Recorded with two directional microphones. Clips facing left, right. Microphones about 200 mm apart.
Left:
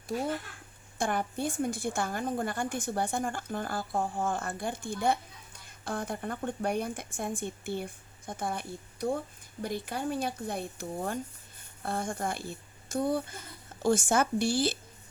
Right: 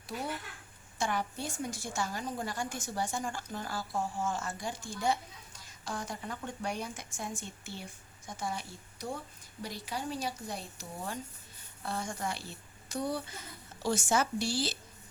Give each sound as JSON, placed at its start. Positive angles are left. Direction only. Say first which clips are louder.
{"t": 0.9, "sound": "a woman's voice", "louder": "left 3 dB", "side_deg": 55}